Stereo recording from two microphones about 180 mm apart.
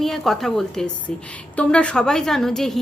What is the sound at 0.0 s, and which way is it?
A woman's voice, centre (ahead or behind).